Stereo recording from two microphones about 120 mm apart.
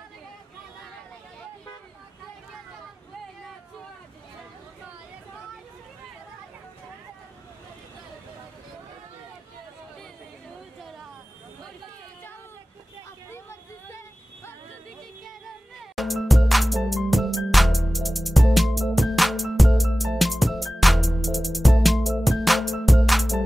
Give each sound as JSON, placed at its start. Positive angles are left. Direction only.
{"t": 10.8, "sound": "a sound", "side_deg": 0}
{"t": 13.8, "sound": "music", "side_deg": 20}
{"t": 16.0, "sound": "music", "side_deg": 0}